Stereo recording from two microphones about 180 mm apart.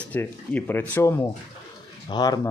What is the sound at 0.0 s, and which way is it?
Speech, 10° left (ahead or behind).